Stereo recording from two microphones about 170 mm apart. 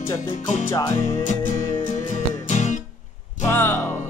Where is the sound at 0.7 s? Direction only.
15° left (ahead or behind).